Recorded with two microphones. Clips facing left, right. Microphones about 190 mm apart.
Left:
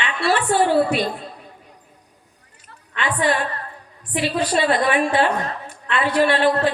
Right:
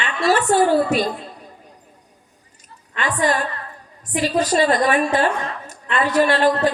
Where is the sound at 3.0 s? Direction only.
45° right (ahead or behind).